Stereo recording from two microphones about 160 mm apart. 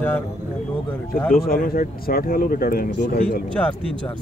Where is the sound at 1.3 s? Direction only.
65° left (ahead or behind).